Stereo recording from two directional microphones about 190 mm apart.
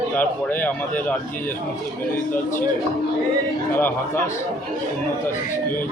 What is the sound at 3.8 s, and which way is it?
Speech, 10° left (ahead or behind).